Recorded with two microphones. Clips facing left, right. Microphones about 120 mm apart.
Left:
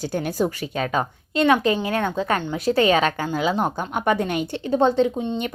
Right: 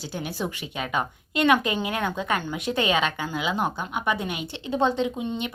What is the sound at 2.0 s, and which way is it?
A woman's voice, 30° left (ahead or behind).